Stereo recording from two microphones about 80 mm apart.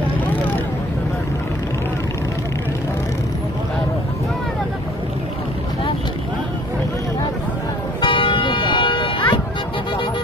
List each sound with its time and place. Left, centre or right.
8.0 s music: left